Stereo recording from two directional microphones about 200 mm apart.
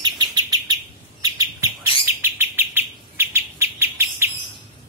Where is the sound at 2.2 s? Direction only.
10° right (ahead or behind).